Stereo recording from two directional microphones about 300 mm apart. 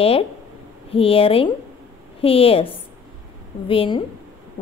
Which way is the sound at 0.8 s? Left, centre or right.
Centre.